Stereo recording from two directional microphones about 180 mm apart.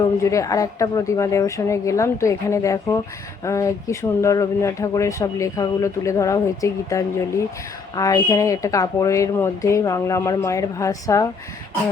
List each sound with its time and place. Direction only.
0.2 s speech: 15° left (ahead or behind)